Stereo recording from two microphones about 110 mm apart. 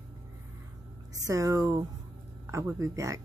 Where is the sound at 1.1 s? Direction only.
30° right (ahead or behind).